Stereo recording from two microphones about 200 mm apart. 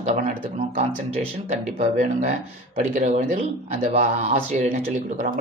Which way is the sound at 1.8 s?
40° right (ahead or behind).